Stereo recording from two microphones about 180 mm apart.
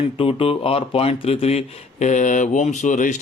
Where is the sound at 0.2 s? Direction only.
30° left (ahead or behind).